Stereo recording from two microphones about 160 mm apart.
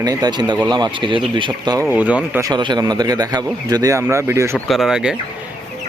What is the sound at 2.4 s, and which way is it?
A man's voice, 25° right (ahead or behind).